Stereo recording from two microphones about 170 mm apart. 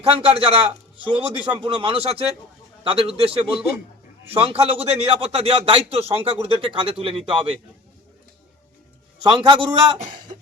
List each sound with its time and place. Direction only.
0.1 s a man's voice: 35° right (ahead or behind)
9.2 s a man's voice: 25° right (ahead or behind)